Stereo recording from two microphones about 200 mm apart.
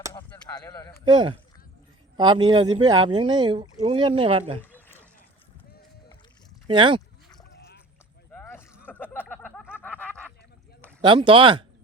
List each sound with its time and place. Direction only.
0.1 s chop: 15° left (ahead or behind)
1.0 s speech: 25° right (ahead or behind)
6.7 s speech: 25° right (ahead or behind)
8.3 s a sound: 10° left (ahead or behind)
9.7 s snicker: 10° left (ahead or behind)
11.0 s speech: 25° right (ahead or behind)